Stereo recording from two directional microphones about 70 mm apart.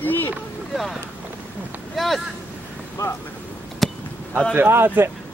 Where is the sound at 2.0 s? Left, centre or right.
Centre.